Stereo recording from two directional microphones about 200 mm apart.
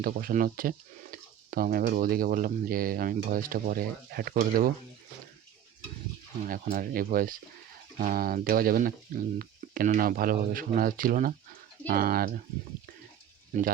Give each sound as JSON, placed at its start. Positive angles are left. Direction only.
{"t": 0.0, "sound": "speech", "side_deg": -45}
{"t": 6.4, "sound": "speech", "side_deg": -45}